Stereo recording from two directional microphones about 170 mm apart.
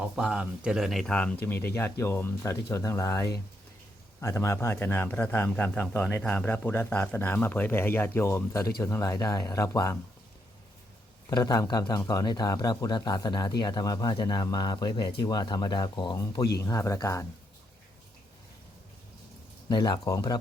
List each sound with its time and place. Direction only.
0.0 s a man's voice: 5° right (ahead or behind); by 10.0 s 15° left (ahead or behind)
11.3 s a man's voice: 20° left (ahead or behind)
19.6 s a man's voice: 25° left (ahead or behind)